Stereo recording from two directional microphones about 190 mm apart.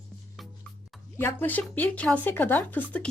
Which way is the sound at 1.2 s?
10° left (ahead or behind).